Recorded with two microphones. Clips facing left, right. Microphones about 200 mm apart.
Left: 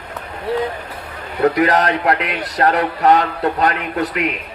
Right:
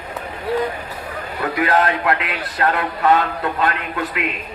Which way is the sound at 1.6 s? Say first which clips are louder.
Left 2 dB; 40° left (ahead or behind).